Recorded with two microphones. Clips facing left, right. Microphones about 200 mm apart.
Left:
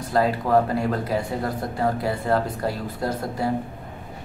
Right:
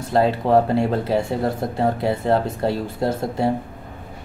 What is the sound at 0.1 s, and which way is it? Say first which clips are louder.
Speech: right 3 dB; 25° right (ahead or behind).